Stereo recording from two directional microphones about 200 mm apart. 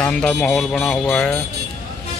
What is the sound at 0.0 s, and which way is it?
Speech, 5° left (ahead or behind).